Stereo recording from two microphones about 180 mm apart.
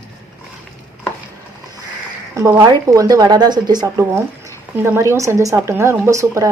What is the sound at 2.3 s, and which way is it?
A woman's voice, 20° right (ahead or behind).